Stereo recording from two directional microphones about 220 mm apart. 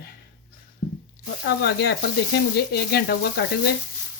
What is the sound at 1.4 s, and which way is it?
Speech, 50° left (ahead or behind).